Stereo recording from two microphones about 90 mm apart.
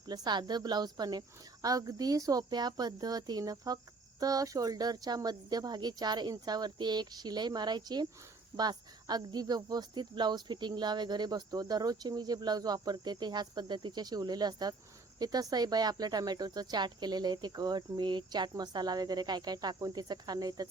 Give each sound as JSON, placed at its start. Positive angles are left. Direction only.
{"t": 0.1, "sound": "speech", "side_deg": -55}